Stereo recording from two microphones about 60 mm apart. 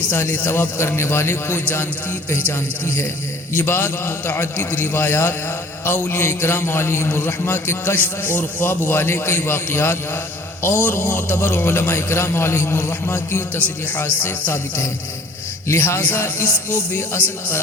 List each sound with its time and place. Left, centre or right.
0.1 s a man's voice: left
3.7 s a man's voice: left
15.7 s a man's voice: left